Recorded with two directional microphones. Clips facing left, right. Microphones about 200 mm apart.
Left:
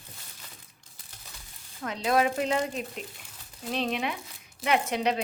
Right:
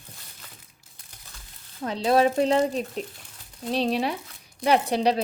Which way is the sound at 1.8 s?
30° right (ahead or behind).